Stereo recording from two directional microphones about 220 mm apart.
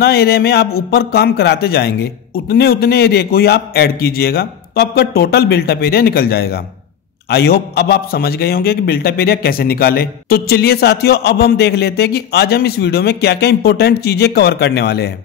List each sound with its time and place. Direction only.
0.0 s a man's voice: 45° left (ahead or behind)